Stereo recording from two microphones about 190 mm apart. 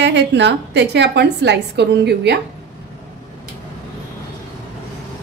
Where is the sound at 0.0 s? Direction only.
65° right (ahead or behind).